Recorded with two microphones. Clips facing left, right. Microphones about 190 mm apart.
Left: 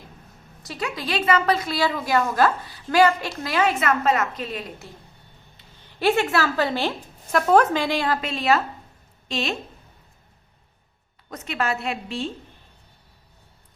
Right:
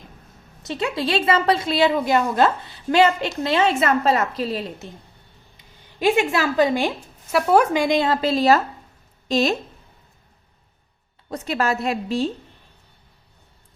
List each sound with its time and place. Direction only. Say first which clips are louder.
0.6 s a woman's voice: right 6 dB; 25° right (ahead or behind)
5.5 s a woman's voice: right 2 dB; 15° right (ahead or behind); by 9.6 s 40° right (ahead or behind)
11.3 s a woman's voice: right 4 dB; 35° right (ahead or behind)